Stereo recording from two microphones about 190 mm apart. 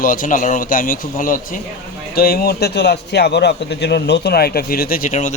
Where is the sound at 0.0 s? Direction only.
45° left (ahead or behind).